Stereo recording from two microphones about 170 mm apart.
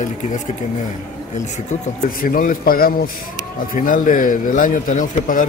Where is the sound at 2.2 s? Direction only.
55° left (ahead or behind).